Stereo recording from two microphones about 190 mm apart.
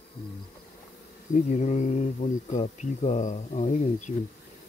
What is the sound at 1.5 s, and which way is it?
Speech, 40° left (ahead or behind).